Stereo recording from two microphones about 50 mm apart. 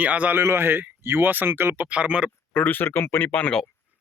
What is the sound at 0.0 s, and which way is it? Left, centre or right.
Speech, right.